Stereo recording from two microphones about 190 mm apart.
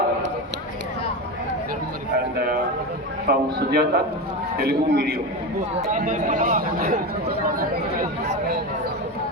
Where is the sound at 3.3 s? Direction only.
60° right (ahead or behind).